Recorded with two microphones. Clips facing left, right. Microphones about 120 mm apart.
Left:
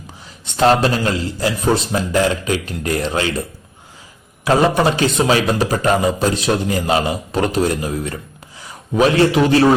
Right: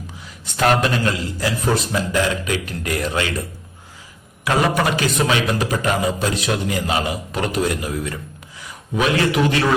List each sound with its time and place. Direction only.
0.4 s a man's voice: 25° left (ahead or behind)
4.4 s a man's voice: 30° left (ahead or behind)